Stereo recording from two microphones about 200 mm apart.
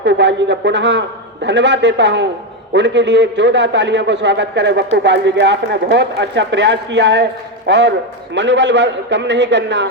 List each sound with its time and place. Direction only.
0.0 s a man's voice: 60° right (ahead or behind)